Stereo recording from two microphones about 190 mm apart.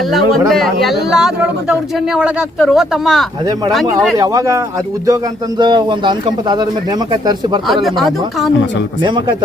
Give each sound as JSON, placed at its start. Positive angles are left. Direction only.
{"t": 0.1, "sound": "speech", "side_deg": 0}
{"t": 4.2, "sound": "a man's voice", "side_deg": -20}
{"t": 7.7, "sound": "speech", "side_deg": 0}
{"t": 9.0, "sound": "a man's voice", "side_deg": -25}